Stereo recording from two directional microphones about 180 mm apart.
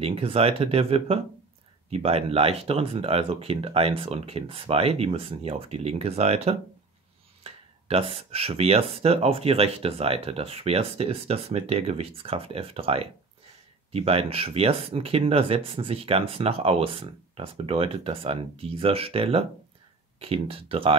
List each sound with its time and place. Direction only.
0.0 s speech: 30° right (ahead or behind)